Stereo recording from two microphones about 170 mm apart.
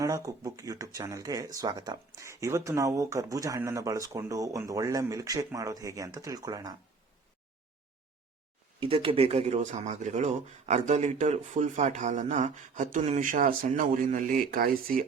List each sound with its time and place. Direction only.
0.0 s speech: 20° right (ahead or behind)
8.8 s speech: 30° right (ahead or behind); by 15.0 s 60° right (ahead or behind)